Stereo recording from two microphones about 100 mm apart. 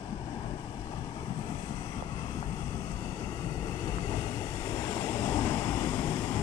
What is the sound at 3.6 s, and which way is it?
Vehicle, 35° left (ahead or behind).